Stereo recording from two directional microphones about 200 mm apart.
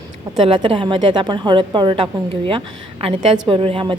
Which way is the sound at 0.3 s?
25° right (ahead or behind).